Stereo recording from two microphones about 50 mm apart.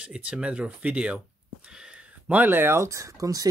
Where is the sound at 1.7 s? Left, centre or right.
Centre.